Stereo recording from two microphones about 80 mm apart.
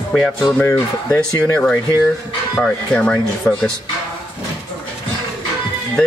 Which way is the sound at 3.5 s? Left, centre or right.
Left.